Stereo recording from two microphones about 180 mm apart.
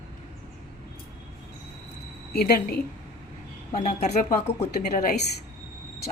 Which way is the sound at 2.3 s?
60° left (ahead or behind).